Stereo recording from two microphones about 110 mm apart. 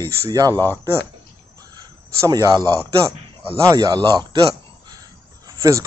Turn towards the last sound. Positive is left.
turn(degrees=-30)  # may be behind; listen again after turning